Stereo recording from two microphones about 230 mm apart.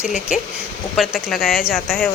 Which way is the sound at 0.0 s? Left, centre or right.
Left.